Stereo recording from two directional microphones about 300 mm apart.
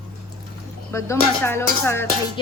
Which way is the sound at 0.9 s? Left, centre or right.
Centre.